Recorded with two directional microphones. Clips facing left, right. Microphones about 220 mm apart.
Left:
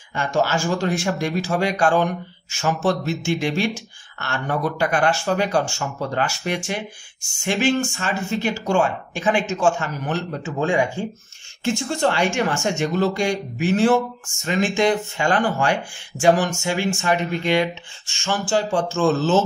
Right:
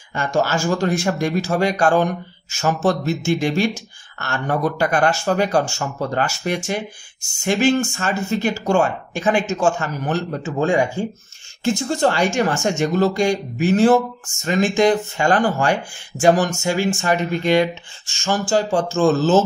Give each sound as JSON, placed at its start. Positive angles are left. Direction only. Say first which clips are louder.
{"t": 0.1, "sound": "speech", "louder": "right 1 dB", "side_deg": -45}